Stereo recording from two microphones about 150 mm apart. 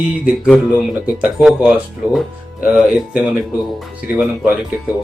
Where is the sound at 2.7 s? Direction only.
5° right (ahead or behind).